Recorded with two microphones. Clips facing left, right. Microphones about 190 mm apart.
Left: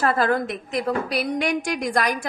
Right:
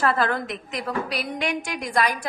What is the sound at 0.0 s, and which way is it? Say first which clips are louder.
A woman's voice: left 2 dB; 45° left (ahead or behind).